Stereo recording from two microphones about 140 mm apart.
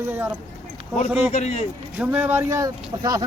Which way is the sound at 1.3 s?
55° left (ahead or behind).